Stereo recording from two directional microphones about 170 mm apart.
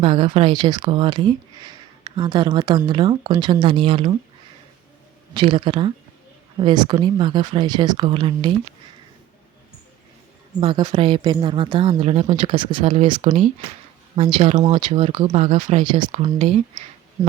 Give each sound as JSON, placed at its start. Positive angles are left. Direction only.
{"t": 0.0, "sound": "speech", "side_deg": -30}
{"t": 5.3, "sound": "speech", "side_deg": -30}
{"t": 10.6, "sound": "speech", "side_deg": -30}
{"t": 13.2, "sound": "speech", "side_deg": -45}
{"t": 14.2, "sound": "speech", "side_deg": -30}
{"t": 15.8, "sound": "speech", "side_deg": -25}